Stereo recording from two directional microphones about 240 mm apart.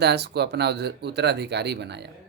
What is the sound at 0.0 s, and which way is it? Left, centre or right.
A man's voice, right.